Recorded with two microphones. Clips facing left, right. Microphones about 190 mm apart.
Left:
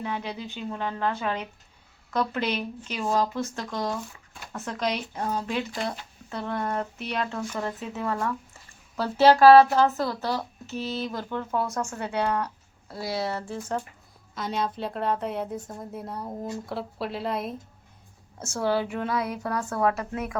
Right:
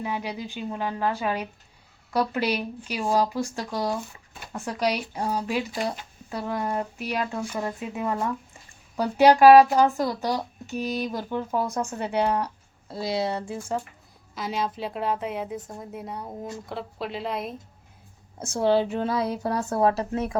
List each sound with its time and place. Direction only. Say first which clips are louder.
0.0 s a woman's voice: right 2 dB; 15° right (ahead or behind)
18.3 s a woman's voice: right 4 dB; 15° right (ahead or behind)